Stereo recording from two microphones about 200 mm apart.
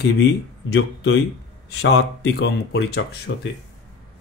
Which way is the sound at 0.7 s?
55° left (ahead or behind).